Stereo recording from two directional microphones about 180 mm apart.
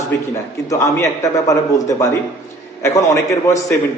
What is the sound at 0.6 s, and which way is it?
A man's voice, 15° left (ahead or behind).